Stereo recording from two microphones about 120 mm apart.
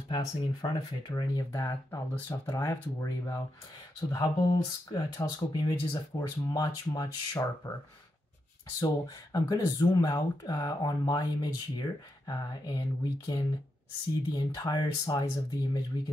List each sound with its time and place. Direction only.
0.1 s speech: 35° left (ahead or behind)
8.7 s speech: 35° left (ahead or behind)